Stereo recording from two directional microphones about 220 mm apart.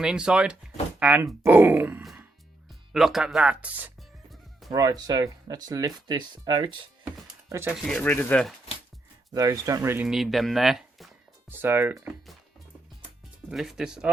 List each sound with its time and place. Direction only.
0.0 s speech: 5° right (ahead or behind)
2.9 s music: centre (ahead or behind)
4.7 s speech: 15° right (ahead or behind)
7.9 s speech: 5° left (ahead or behind)
9.3 s speech: 15° right (ahead or behind); by 12.4 s centre (ahead or behind)
13.5 s speech: centre (ahead or behind)